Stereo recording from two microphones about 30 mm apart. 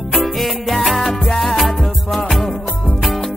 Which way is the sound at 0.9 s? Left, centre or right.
Centre.